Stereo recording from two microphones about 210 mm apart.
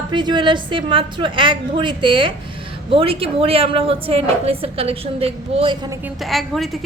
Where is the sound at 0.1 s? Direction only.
20° right (ahead or behind).